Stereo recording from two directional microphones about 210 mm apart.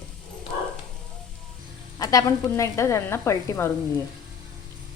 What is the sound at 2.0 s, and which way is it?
Speech, 15° left (ahead or behind).